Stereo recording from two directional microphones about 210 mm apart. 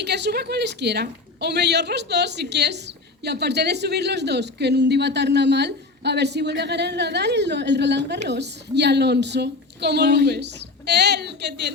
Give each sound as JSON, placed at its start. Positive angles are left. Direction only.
{"t": 0.0, "sound": "speech", "side_deg": -55}